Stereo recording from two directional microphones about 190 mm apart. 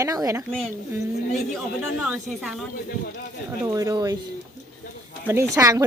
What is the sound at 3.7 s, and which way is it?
Speech, 20° right (ahead or behind).